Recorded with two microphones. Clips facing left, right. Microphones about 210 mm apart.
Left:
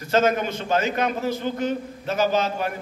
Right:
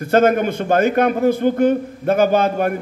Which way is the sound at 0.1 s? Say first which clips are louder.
Right 6 dB; 55° right (ahead or behind).